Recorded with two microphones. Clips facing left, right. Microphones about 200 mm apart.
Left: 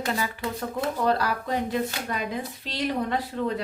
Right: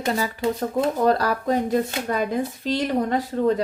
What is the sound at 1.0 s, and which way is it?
Speech, 40° right (ahead or behind).